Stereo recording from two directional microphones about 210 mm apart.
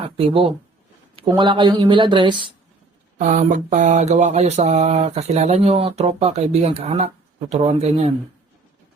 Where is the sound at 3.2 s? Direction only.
35° right (ahead or behind).